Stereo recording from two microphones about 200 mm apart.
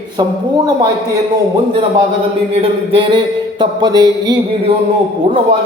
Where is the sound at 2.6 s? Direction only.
25° right (ahead or behind).